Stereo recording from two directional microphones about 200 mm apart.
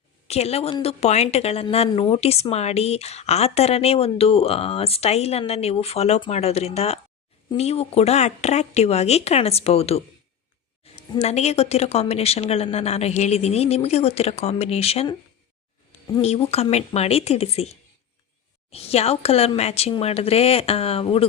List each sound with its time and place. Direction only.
0.3 s a woman's voice: 30° left (ahead or behind)
16.2 s a woman's voice: 30° left (ahead or behind)